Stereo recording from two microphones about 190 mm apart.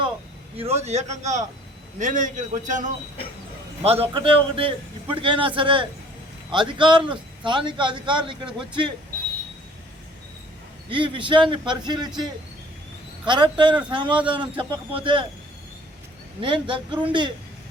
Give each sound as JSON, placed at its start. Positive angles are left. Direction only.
{"t": 0.5, "sound": "a man's voice", "side_deg": -30}
{"t": 3.8, "sound": "a man's voice", "side_deg": -30}
{"t": 10.8, "sound": "a man's voice", "side_deg": -25}
{"t": 13.2, "sound": "a man's voice", "side_deg": -25}
{"t": 16.4, "sound": "a man's voice", "side_deg": -25}